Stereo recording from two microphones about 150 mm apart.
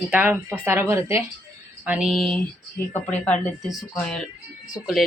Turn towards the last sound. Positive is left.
turn(degrees=-5)  # may be behind; listen again after turning